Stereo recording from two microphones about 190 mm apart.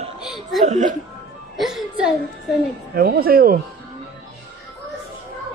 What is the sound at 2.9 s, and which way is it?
Speech, 50° right (ahead or behind).